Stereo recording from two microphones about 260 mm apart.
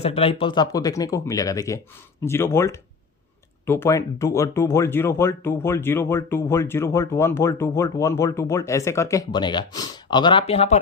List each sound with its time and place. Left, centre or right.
0.0 s speech: left